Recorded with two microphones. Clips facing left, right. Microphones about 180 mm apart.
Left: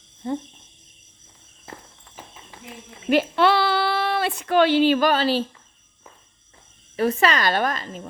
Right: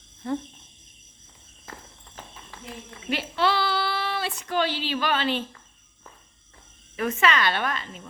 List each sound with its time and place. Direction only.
0.2 s speech: 25° left (ahead or behind)
1.7 s walk: 25° left (ahead or behind)
3.1 s speech: 55° left (ahead or behind); by 5.4 s 35° left (ahead or behind)
6.9 s speech: 35° left (ahead or behind)